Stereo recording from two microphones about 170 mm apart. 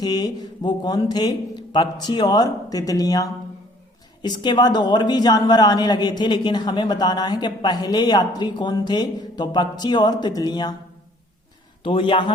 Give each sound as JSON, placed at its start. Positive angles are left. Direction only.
{"t": 0.0, "sound": "speech", "side_deg": 20}
{"t": 11.8, "sound": "speech", "side_deg": 30}